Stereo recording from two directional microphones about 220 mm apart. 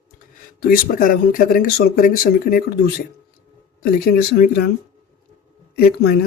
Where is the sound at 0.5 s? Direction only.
40° left (ahead or behind).